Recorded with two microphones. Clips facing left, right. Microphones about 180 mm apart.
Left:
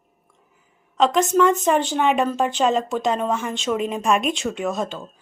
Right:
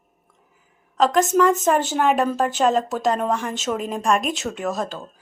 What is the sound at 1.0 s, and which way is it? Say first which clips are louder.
Speech: even; centre (ahead or behind).